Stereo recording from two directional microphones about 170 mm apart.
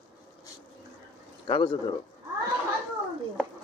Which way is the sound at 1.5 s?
30° left (ahead or behind).